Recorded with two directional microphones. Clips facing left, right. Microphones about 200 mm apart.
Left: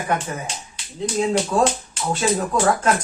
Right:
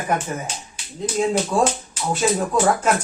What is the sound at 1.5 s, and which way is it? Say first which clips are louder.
Speech: left 1 dB; 10° right (ahead or behind).